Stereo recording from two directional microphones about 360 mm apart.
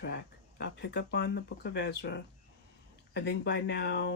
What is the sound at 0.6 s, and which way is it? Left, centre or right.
Speech, left.